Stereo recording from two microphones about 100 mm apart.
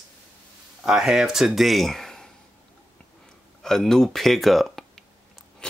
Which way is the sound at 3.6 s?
5° left (ahead or behind).